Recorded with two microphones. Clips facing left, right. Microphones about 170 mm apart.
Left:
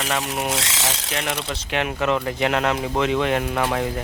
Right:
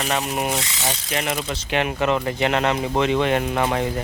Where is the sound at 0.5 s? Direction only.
90° left.